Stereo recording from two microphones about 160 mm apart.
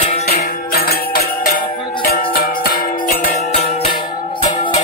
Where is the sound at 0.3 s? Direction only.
65° left (ahead or behind).